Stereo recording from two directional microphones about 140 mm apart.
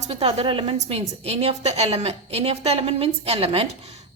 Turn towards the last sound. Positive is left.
turn(degrees=-45)  # may be behind; listen again after turning